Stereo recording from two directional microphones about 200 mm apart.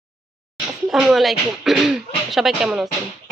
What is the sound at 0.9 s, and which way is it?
Speech, centre (ahead or behind).